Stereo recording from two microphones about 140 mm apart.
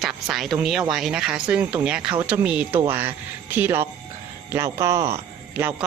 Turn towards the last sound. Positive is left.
turn(degrees=-15)  # may be behind; listen again after turning